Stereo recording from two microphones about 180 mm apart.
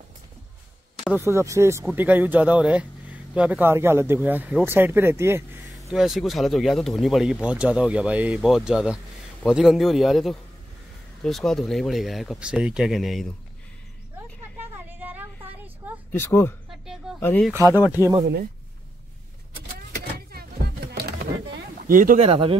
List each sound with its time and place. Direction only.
1.1 s speech: 15° right (ahead or behind)
5.7 s speech: centre (ahead or behind)
15.0 s a sound: 10° right (ahead or behind)
16.1 s speech: 15° left (ahead or behind)
16.8 s a sound: centre (ahead or behind)
17.2 s speech: 10° left (ahead or behind)
17.5 s speech: 15° right (ahead or behind)
20.2 s a sound: 60° right (ahead or behind)
22.2 s speech: 30° right (ahead or behind)